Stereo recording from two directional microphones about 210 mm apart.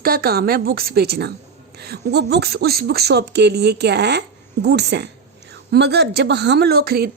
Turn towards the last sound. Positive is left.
turn(degrees=-45)  # may be behind; listen again after turning